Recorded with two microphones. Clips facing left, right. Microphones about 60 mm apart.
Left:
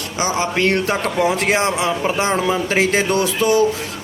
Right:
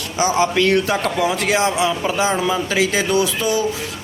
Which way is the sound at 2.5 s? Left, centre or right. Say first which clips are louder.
Left 2 dB; left.